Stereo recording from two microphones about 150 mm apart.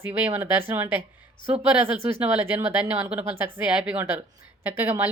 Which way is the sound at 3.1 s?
10° right (ahead or behind).